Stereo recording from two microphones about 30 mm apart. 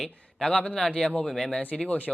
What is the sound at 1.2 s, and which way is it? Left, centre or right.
Speech, centre.